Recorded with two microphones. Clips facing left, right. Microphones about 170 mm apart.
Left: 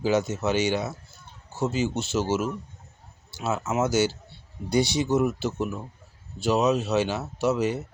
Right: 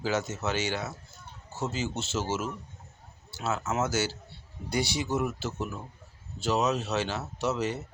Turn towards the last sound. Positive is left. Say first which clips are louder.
# left 5 dB
turn(degrees=10)  # may be behind; listen again after turning